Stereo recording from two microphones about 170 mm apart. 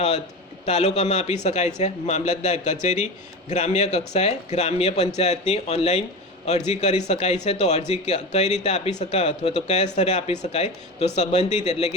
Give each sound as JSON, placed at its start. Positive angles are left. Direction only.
{"t": 0.6, "sound": "speech", "side_deg": 40}